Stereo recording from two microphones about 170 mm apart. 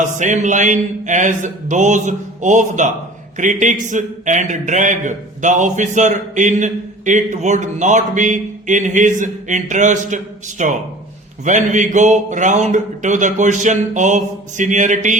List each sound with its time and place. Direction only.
0.0 s a man's voice: 45° right (ahead or behind)